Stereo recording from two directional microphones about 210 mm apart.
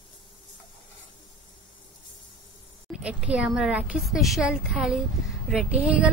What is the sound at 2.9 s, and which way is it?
Speech, 5° right (ahead or behind).